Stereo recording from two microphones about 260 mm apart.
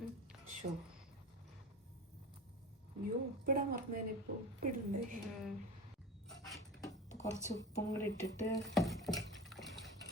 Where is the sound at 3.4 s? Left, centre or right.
Right.